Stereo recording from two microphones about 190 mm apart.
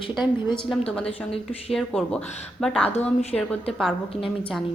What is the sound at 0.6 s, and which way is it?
A woman's voice, 5° left (ahead or behind).